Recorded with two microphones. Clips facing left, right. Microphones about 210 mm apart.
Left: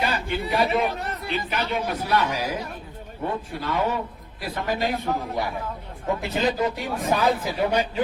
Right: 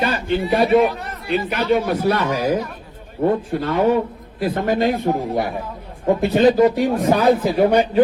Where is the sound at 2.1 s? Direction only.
50° right (ahead or behind).